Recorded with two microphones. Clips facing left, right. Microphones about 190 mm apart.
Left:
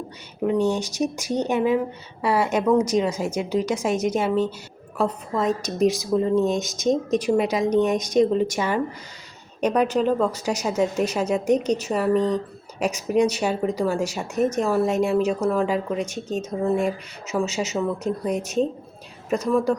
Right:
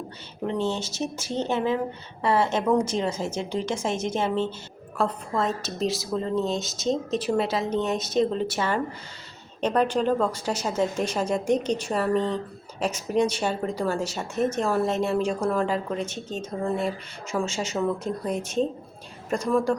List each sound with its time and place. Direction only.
0.4 s a woman's voice: 10° left (ahead or behind)
19.5 s speech: centre (ahead or behind)